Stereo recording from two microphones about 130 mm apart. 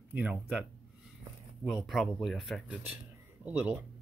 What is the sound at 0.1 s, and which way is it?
Speech, 10° right (ahead or behind).